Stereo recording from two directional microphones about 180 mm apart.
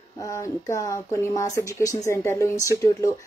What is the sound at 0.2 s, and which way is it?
Speech, 15° left (ahead or behind).